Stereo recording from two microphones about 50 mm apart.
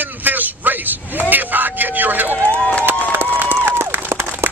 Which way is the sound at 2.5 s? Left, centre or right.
Left.